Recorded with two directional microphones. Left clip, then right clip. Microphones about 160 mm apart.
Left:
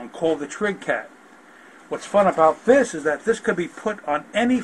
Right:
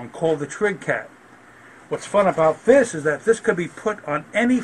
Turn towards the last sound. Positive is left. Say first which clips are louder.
# even
turn(degrees=-25)  # may be behind; listen again after turning